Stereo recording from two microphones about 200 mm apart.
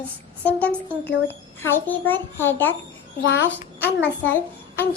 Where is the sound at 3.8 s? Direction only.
10° left (ahead or behind).